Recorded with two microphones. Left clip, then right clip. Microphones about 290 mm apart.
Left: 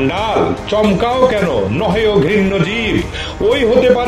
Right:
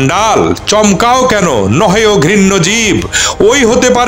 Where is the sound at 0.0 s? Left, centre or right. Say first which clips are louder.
Right 6 dB; right.